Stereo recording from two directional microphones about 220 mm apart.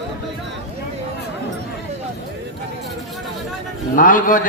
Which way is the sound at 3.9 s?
35° left (ahead or behind).